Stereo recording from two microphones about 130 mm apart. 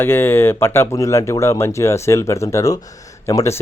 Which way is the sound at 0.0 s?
15° left (ahead or behind).